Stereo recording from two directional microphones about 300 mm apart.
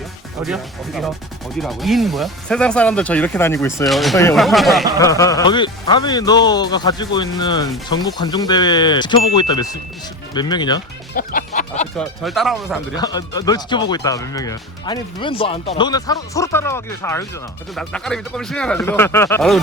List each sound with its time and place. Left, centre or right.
0.4 s speech: centre
4.9 s speech: centre
11.2 s music: left
11.9 s speech: centre
13.0 s speech: centre